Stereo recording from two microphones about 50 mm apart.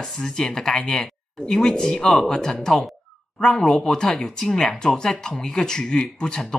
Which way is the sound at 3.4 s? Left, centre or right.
Centre.